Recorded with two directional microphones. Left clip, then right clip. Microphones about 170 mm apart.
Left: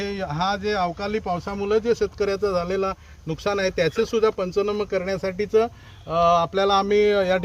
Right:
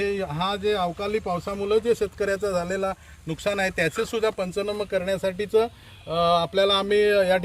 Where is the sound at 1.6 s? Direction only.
5° left (ahead or behind); by 2.9 s 20° left (ahead or behind).